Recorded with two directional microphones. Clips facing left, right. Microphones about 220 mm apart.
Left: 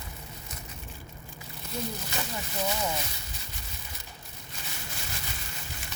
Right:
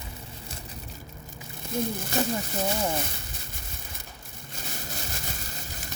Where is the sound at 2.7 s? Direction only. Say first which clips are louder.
Right 4 dB; 30° right (ahead or behind).